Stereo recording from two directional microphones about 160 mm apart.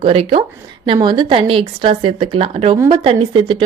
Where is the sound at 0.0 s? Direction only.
40° right (ahead or behind).